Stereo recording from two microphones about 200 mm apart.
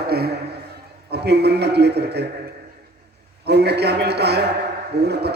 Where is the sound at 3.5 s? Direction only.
55° right (ahead or behind).